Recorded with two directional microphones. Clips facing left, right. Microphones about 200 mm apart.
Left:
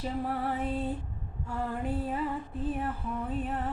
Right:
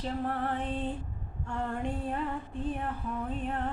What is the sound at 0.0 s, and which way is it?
Female singing, 10° left (ahead or behind).